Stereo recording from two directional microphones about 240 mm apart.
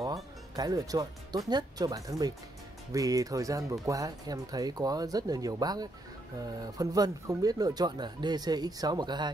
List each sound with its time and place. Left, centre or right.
0.0 s music: centre
1.5 s speech: centre